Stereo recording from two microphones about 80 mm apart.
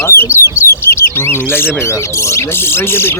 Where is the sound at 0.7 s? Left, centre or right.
Left.